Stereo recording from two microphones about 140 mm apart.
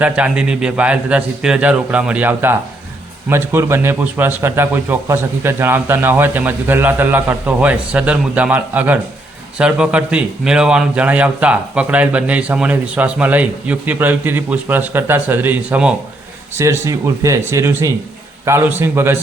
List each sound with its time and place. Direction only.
0.0 s a man's voice: 5° right (ahead or behind)
16.6 s a man's voice: 20° right (ahead or behind)